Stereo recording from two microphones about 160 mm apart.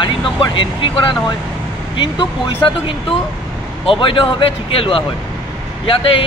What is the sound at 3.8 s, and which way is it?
A man's voice, 30° left (ahead or behind).